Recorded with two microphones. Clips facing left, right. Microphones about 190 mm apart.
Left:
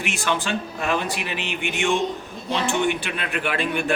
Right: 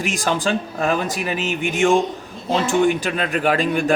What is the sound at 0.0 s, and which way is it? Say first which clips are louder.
A man's voice: right 4 dB; 40° right (ahead or behind).